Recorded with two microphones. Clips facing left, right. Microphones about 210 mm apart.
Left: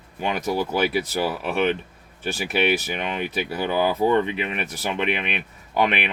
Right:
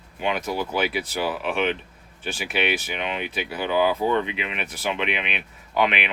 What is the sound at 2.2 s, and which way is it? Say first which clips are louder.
Speech: left 3 dB; 40° left (ahead or behind).